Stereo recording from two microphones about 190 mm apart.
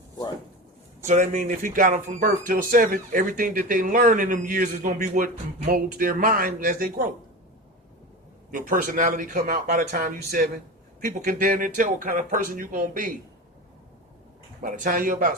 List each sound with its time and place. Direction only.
1.0 s speech: 40° right (ahead or behind)
8.4 s speech: 45° right (ahead or behind)
14.6 s speech: 45° right (ahead or behind)